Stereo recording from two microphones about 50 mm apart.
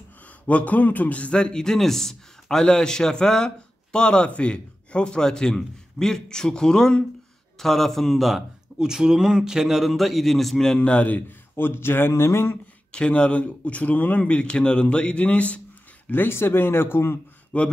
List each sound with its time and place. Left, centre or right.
0.5 s a man's voice: left; by 10.8 s centre
10.8 s speech: left
11.1 s speech: left
12.1 s speech: left
12.9 s speech: left
16.1 s speech: left
17.5 s speech: left